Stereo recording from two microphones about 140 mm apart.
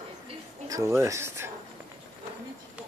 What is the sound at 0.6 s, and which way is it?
Speech, 20° right (ahead or behind).